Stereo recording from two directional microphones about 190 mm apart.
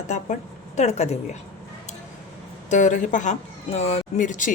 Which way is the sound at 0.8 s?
35° left (ahead or behind).